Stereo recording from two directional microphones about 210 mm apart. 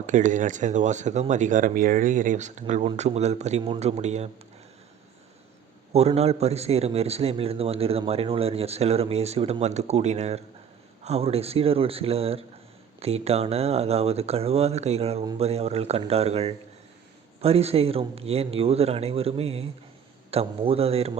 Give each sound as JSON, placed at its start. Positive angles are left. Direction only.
{"t": 0.0, "sound": "speech", "side_deg": -35}
{"t": 5.9, "sound": "a man's voice", "side_deg": -30}